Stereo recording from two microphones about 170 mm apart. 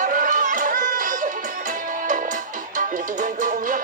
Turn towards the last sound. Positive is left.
turn(degrees=-50)  # may be behind; listen again after turning